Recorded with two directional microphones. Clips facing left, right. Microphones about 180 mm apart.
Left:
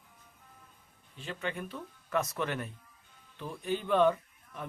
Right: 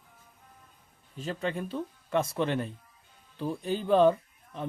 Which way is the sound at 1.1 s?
40° right (ahead or behind).